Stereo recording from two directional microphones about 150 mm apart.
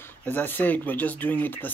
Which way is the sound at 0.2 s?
10° left (ahead or behind).